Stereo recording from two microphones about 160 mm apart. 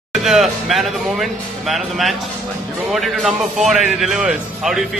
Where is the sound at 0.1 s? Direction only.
Centre (ahead or behind).